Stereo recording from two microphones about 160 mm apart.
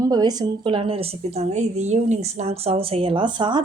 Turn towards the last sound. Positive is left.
turn(degrees=-30)  # may be behind; listen again after turning